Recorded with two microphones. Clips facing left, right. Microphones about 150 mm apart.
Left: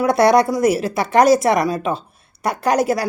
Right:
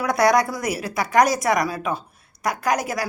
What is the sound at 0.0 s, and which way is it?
A woman's voice, 25° left (ahead or behind).